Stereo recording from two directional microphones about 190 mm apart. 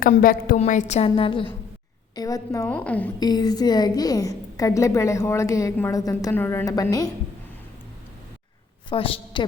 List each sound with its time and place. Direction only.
0.0 s a woman's voice: 50° left (ahead or behind)
0.6 s a woman's voice: 40° left (ahead or behind); by 3.1 s 10° left (ahead or behind)
3.2 s a woman's voice: 20° left (ahead or behind)
8.9 s a woman's voice: 30° left (ahead or behind)